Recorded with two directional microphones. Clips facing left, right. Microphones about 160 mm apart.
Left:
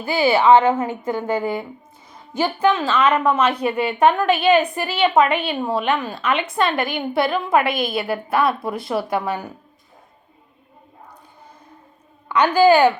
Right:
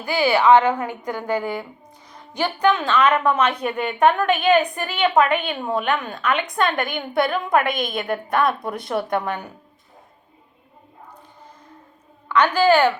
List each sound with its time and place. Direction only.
0.1 s a woman's voice: 25° left (ahead or behind)
2.3 s a woman's voice: 5° left (ahead or behind)
12.3 s a woman's voice: 10° left (ahead or behind)